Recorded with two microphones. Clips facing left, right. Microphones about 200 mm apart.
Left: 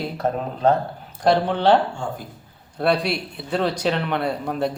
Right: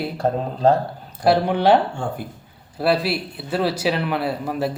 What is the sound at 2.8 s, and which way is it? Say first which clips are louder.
Speech: right 1 dB; 5° right (ahead or behind).